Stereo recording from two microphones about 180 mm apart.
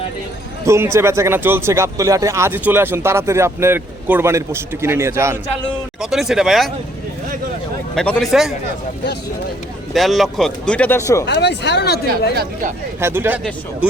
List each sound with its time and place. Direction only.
0.6 s a man's voice: 15° right (ahead or behind)
6.0 s speech: centre (ahead or behind)
7.9 s speech: centre (ahead or behind)
9.9 s speech: centre (ahead or behind); by 11.3 s 15° left (ahead or behind)
11.3 s speech: 70° left (ahead or behind)
13.0 s speech: 15° right (ahead or behind)